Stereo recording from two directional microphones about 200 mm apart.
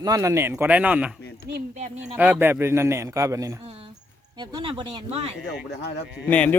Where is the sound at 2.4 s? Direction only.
10° right (ahead or behind).